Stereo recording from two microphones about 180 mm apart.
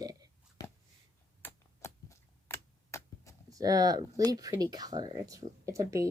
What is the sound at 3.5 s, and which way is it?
Speech, 20° right (ahead or behind).